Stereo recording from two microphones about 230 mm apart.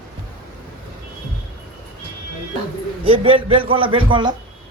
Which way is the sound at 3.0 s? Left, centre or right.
Right.